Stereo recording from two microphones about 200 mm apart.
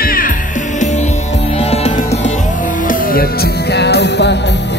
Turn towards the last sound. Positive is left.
turn(degrees=60)  # may be behind; listen again after turning